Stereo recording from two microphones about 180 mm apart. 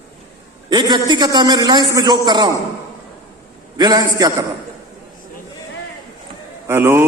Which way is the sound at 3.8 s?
20° right (ahead or behind).